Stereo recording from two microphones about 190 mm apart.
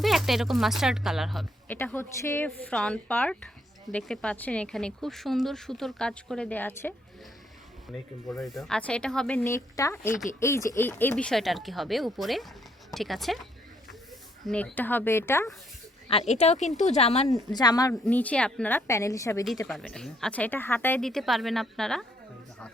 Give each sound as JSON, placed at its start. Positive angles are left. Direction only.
{"t": 0.0, "sound": "speech", "side_deg": 0}
{"t": 8.3, "sound": "speech", "side_deg": 0}
{"t": 16.0, "sound": "speech", "side_deg": 35}
{"t": 17.5, "sound": "speech", "side_deg": 20}
{"t": 18.0, "sound": "speech", "side_deg": 10}
{"t": 19.6, "sound": "speech", "side_deg": 5}